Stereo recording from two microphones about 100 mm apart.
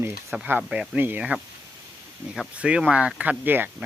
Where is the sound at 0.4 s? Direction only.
20° right (ahead or behind).